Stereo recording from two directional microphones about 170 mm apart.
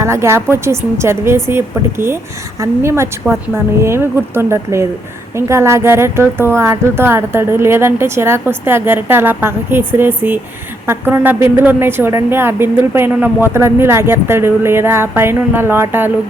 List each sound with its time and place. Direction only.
0.0 s a woman's voice: 15° right (ahead or behind)